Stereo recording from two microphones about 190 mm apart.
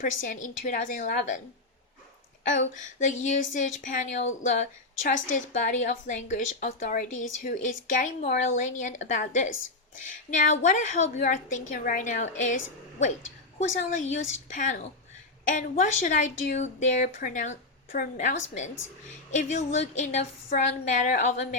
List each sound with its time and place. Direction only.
0.0 s a woman's voice: 45° left (ahead or behind)
2.5 s a woman's voice: 40° left (ahead or behind)
13.6 s a woman's voice: 40° left (ahead or behind)